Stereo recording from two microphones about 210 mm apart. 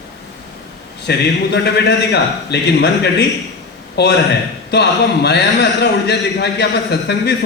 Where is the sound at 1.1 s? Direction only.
50° left (ahead or behind).